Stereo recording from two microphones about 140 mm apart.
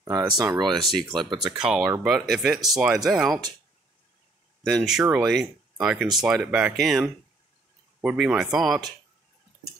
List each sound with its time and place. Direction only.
0.0 s speech: 25° right (ahead or behind)
0.8 s speech: centre (ahead or behind)
4.6 s speech: centre (ahead or behind)